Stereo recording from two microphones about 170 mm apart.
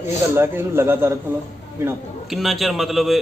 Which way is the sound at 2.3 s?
Centre (ahead or behind).